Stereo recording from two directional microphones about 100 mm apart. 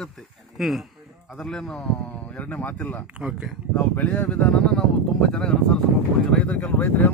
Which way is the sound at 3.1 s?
10° right (ahead or behind).